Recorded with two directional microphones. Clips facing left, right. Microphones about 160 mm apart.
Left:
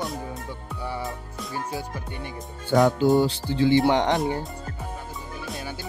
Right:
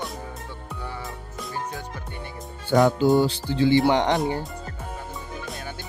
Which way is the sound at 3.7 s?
Centre (ahead or behind).